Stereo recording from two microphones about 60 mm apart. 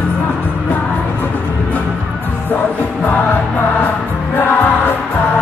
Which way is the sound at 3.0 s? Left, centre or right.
Left.